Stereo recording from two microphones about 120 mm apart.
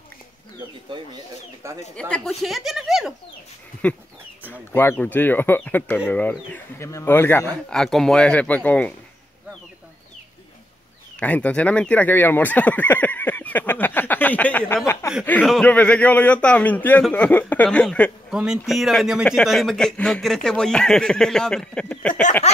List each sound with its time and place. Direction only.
1.6 s speech: 25° right (ahead or behind)
2.0 s speech: 10° left (ahead or behind)
3.8 s a man's voice: 10° left (ahead or behind)
7.7 s speech: 5° left (ahead or behind)
11.1 s a man's voice: 10° left (ahead or behind)
15.4 s speech: centre (ahead or behind)
18.3 s speech: 5° right (ahead or behind); by 22.2 s 10° left (ahead or behind)